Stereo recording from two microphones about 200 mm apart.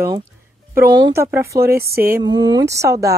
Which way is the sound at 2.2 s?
20° right (ahead or behind).